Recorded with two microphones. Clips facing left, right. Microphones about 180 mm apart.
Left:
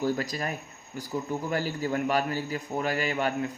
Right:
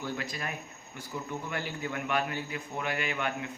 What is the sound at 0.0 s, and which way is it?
Speech, 40° left (ahead or behind).